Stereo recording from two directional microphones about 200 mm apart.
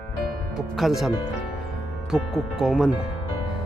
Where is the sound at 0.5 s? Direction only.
Centre (ahead or behind).